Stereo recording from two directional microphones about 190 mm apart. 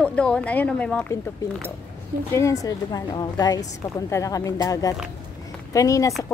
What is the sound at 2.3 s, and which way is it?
A woman's voice, 15° left (ahead or behind).